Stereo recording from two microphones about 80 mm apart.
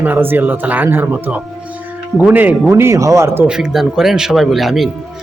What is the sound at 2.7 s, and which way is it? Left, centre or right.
Speech, right.